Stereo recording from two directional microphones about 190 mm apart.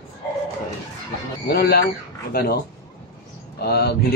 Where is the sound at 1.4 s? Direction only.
55° left (ahead or behind).